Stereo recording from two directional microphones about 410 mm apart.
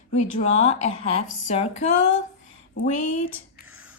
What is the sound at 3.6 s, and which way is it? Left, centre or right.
Whispering, centre.